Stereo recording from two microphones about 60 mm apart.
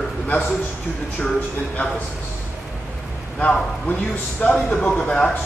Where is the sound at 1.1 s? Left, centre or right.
Left.